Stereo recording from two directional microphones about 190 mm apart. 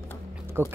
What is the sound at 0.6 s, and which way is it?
Speech, 10° right (ahead or behind).